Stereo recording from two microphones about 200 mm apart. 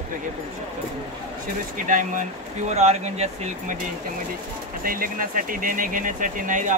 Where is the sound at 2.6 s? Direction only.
35° right (ahead or behind).